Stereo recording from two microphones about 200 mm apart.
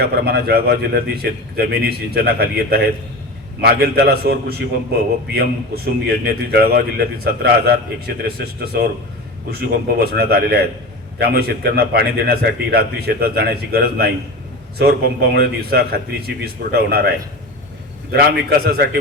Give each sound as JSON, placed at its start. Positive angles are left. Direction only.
{"t": 0.0, "sound": "a man's voice", "side_deg": -50}